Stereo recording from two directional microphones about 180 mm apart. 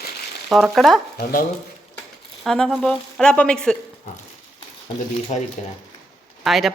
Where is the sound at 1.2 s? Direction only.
55° left (ahead or behind).